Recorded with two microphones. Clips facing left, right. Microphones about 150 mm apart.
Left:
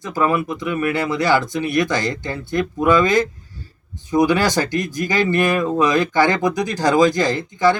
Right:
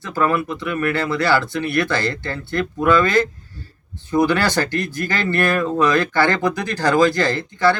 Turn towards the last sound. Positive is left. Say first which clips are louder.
# left 1 dB
turn(degrees=15)  # may be behind; listen again after turning